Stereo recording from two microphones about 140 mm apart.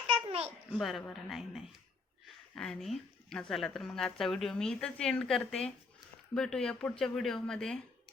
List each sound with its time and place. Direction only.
0.1 s babbling: 45° right (ahead or behind)
0.8 s speech: centre (ahead or behind)